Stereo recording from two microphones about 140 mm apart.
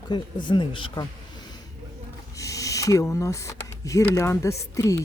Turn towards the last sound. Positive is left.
turn(degrees=20)  # may be behind; listen again after turning